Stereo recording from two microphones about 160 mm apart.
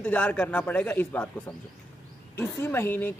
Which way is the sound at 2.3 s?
15° left (ahead or behind).